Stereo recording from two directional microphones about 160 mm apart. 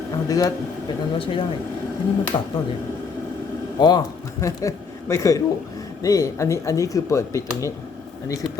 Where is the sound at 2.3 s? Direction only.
25° left (ahead or behind).